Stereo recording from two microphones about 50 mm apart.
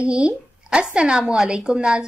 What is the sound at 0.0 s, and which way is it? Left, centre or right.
A woman's voice, right.